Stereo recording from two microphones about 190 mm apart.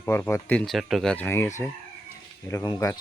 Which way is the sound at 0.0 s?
15° left (ahead or behind).